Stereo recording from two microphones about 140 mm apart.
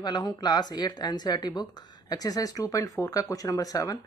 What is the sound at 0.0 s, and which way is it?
Speech, 30° left (ahead or behind).